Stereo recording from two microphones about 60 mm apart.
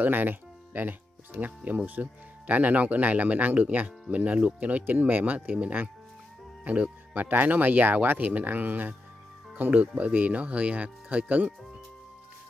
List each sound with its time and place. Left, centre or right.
0.0 s speech: right